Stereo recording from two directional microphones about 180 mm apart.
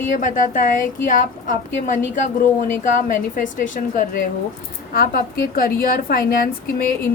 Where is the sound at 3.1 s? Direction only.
45° left (ahead or behind).